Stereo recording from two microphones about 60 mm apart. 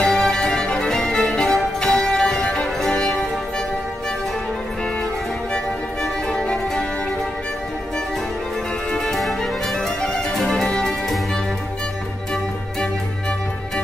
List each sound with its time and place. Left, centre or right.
0.0 s music: centre
2.9 s music: centre
6.4 s music: centre
8.9 s music: centre
10.7 s music: centre